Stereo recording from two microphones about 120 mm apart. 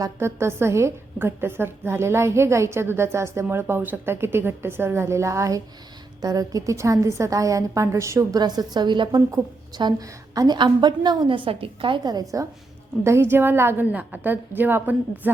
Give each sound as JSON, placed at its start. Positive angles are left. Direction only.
{"t": 0.0, "sound": "a woman's voice", "side_deg": -20}
{"t": 8.4, "sound": "a woman's voice", "side_deg": -35}